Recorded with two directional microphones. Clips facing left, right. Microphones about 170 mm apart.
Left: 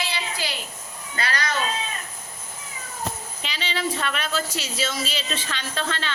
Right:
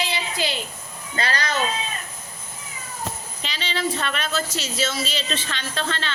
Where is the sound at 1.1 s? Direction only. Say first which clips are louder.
Right 2 dB; 30° right (ahead or behind).